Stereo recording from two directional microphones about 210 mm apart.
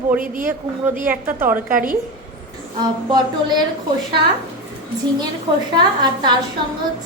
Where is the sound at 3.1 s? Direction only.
20° right (ahead or behind).